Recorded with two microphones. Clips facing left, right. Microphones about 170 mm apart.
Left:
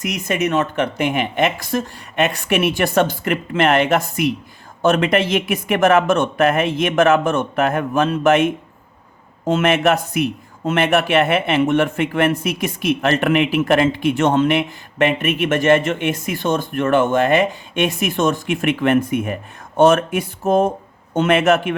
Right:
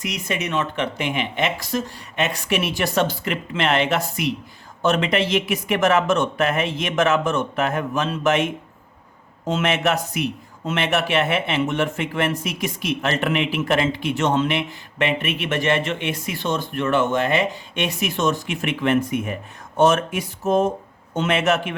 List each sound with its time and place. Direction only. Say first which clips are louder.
0.0 s a man's voice: left 6 dB; 50° left (ahead or behind)
9.5 s a man's voice: left 5 dB; 55° left (ahead or behind)